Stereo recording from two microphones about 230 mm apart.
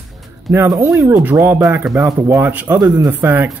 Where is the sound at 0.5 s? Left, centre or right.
Centre.